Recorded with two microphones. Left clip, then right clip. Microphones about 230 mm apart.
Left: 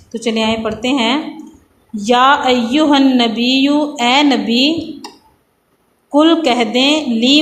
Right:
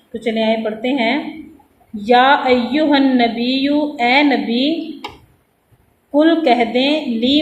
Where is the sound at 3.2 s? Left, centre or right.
Left.